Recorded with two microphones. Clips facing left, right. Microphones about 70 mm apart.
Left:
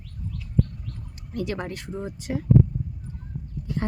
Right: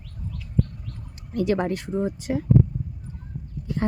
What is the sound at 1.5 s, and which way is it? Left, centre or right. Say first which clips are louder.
Speech: right 7 dB; right.